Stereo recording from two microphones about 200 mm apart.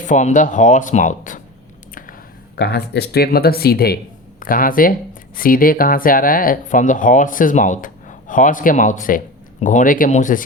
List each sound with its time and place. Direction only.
0.0 s speech: 35° left (ahead or behind)
2.6 s speech: 55° left (ahead or behind)